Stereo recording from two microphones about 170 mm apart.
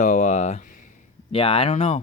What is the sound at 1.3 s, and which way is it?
Speech, 30° left (ahead or behind).